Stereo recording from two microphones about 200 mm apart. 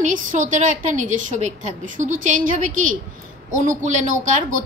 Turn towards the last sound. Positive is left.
turn(degrees=-40)  # may be behind; listen again after turning